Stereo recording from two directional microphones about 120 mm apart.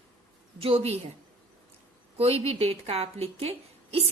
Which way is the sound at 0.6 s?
50° right (ahead or behind).